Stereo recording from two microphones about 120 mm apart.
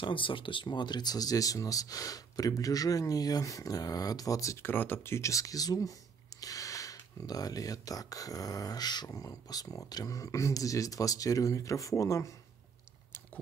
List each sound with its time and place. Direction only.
0.0 s speech: 45° left (ahead or behind); by 12.3 s 25° left (ahead or behind)